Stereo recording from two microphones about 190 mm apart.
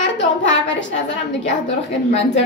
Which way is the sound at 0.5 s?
75° left (ahead or behind).